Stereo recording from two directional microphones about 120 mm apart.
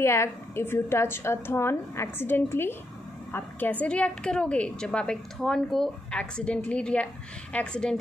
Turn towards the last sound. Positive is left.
turn(degrees=5)  # may be behind; listen again after turning